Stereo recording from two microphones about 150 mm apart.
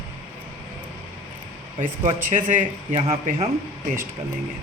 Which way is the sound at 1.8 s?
55° right (ahead or behind).